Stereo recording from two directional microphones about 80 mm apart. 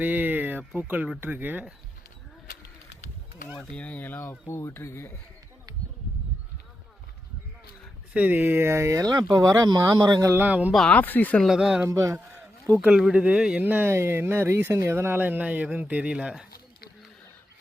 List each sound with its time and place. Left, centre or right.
0.0 s a sound: right
0.8 s speech: centre
3.7 s speech: centre; by 5.1 s left
8.1 s speech: right
9.6 s speech: right
10.3 s speech: centre
10.8 s speech: centre
11.4 s speech: centre
11.9 s speech: right
12.9 s speech: centre